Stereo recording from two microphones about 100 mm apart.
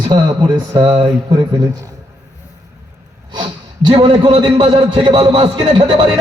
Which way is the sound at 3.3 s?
55° right (ahead or behind).